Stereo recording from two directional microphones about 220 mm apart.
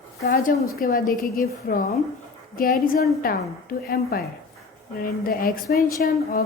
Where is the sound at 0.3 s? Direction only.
40° left (ahead or behind).